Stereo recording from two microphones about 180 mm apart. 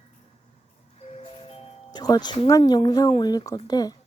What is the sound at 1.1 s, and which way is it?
Music, 35° left (ahead or behind).